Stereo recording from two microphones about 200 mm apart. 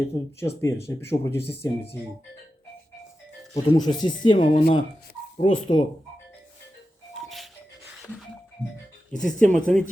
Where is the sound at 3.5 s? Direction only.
20° left (ahead or behind).